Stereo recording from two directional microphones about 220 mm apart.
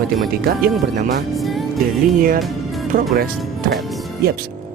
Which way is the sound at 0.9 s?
35° right (ahead or behind).